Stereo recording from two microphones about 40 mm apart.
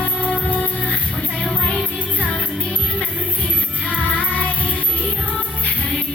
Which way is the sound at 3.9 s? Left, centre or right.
Left.